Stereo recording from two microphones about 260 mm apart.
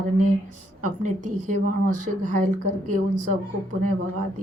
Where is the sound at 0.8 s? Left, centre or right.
Right.